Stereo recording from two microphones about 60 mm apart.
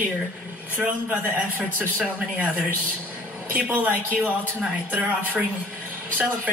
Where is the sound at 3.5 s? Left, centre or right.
Right.